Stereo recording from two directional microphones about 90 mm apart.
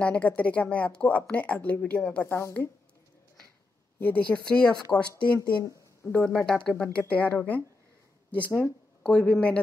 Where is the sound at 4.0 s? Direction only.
15° left (ahead or behind).